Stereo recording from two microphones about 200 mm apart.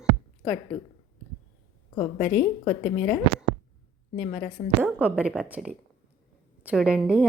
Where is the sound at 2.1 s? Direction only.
5° left (ahead or behind).